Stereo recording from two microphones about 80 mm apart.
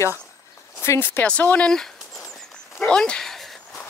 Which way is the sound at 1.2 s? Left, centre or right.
Centre.